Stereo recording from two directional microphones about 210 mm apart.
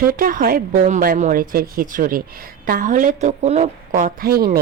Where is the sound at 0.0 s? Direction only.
45° right (ahead or behind).